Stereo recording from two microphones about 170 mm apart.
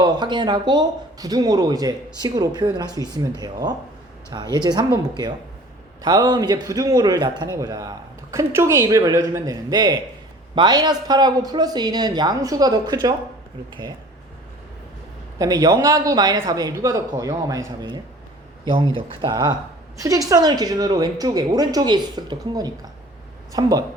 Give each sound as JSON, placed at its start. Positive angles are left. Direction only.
{"t": 0.0, "sound": "a man's voice", "side_deg": -25}
{"t": 15.4, "sound": "a man's voice", "side_deg": -20}